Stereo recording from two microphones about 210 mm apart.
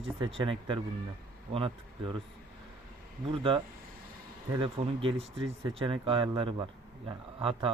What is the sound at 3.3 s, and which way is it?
A man's voice, 25° right (ahead or behind).